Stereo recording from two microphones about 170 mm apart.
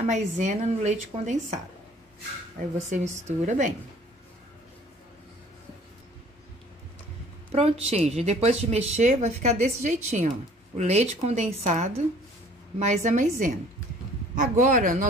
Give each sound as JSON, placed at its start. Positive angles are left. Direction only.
{"t": 0.0, "sound": "speech", "side_deg": -45}
{"t": 2.9, "sound": "speech", "side_deg": -45}
{"t": 7.5, "sound": "speech", "side_deg": -35}